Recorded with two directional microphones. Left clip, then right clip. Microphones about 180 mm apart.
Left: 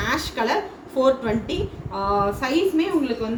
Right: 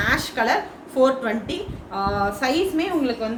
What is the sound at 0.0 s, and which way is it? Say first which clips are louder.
A woman's voice: right 2 dB; 25° right (ahead or behind).